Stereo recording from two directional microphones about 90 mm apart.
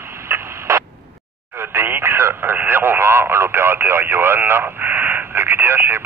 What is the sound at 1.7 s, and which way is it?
Speech, 25° right (ahead or behind).